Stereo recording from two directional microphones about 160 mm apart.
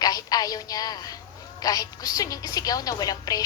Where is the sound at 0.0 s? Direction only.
25° left (ahead or behind).